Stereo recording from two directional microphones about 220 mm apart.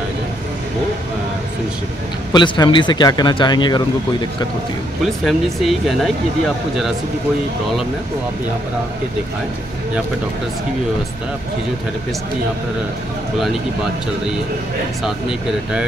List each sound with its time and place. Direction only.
2.3 s speech: 20° left (ahead or behind)
5.0 s speech: centre (ahead or behind)